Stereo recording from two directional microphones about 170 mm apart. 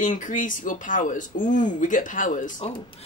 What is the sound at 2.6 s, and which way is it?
Speech, 30° left (ahead or behind).